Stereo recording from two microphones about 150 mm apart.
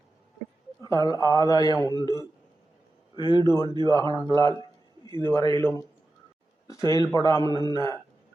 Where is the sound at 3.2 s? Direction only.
30° right (ahead or behind).